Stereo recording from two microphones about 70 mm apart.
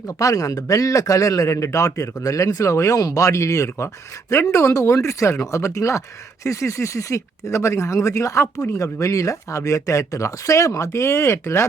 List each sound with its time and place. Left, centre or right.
0.1 s speech: left